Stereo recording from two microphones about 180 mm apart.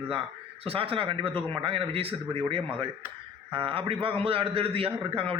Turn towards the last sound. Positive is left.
turn(degrees=-30)  # may be behind; listen again after turning